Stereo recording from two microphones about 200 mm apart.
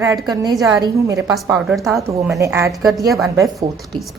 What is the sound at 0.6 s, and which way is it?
Speech, 15° right (ahead or behind).